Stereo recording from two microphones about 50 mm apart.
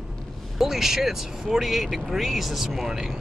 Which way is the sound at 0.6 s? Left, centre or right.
Centre.